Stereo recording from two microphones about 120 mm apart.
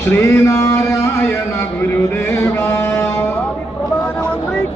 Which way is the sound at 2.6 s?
20° left (ahead or behind).